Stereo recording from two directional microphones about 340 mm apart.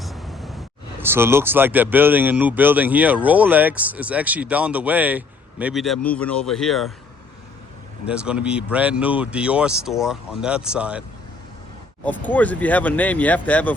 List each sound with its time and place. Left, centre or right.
0.0 s a sound: centre
1.0 s speech: centre
8.0 s speech: centre
12.0 s speech: centre